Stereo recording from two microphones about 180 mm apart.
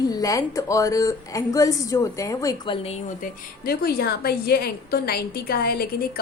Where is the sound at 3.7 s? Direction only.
60° left (ahead or behind).